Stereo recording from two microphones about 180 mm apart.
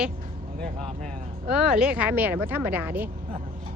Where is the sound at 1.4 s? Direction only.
5° right (ahead or behind).